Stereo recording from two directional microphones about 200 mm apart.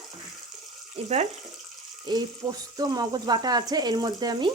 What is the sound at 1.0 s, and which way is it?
Speech, 30° right (ahead or behind).